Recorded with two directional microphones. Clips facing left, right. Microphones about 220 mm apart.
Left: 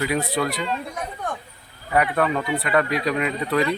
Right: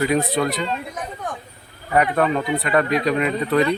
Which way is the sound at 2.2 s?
20° right (ahead or behind).